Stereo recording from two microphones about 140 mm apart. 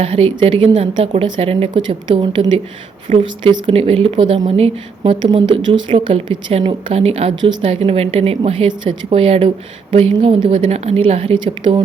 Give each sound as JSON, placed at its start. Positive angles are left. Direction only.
{"t": 0.0, "sound": "a woman's voice", "side_deg": -40}
{"t": 10.7, "sound": "a woman's voice", "side_deg": -45}